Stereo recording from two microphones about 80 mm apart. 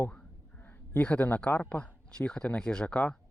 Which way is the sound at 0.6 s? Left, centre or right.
Left.